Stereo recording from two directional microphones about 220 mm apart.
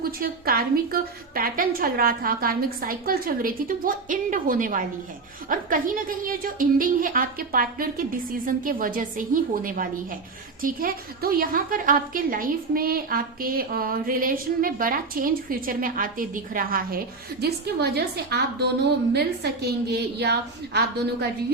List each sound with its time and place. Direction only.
0.0 s a woman's voice: 40° right (ahead or behind)